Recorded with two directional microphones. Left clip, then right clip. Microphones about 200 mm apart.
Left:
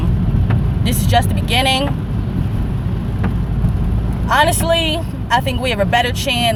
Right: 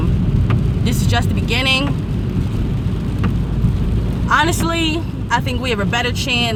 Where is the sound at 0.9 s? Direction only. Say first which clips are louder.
Left 5 dB; centre (ahead or behind).